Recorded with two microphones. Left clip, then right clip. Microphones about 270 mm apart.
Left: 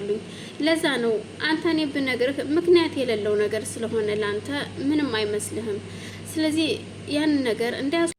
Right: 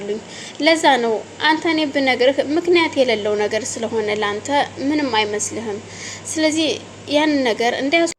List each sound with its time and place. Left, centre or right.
0.6 s a woman's voice: centre
6.3 s a woman's voice: centre